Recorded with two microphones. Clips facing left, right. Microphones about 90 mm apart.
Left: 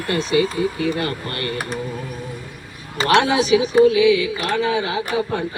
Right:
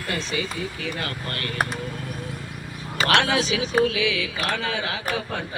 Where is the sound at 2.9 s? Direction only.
20° left (ahead or behind).